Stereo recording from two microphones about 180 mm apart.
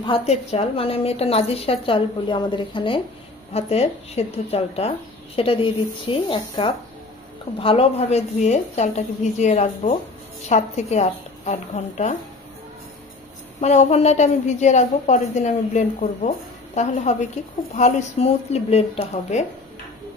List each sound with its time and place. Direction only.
0.0 s a woman's voice: 35° left (ahead or behind)
13.6 s a woman's voice: 40° left (ahead or behind)